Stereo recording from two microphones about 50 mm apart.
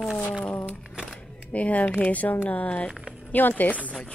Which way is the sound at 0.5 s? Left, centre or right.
Left.